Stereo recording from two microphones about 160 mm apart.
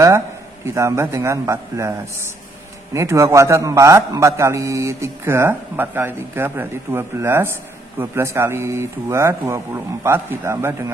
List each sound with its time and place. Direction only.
0.7 s a man's voice: 15° right (ahead or behind)